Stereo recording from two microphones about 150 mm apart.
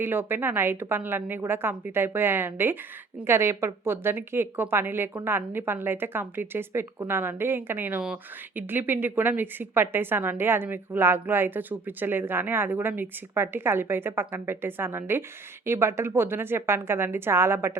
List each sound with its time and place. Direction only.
0.0 s a woman's voice: 15° right (ahead or behind)